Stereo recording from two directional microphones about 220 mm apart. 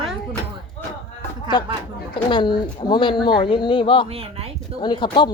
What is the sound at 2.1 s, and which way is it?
Speech, 20° left (ahead or behind).